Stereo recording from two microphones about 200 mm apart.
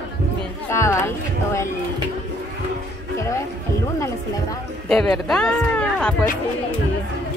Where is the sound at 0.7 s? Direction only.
15° left (ahead or behind).